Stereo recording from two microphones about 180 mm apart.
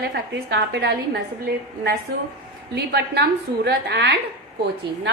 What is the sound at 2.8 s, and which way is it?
A woman's voice, 65° right (ahead or behind).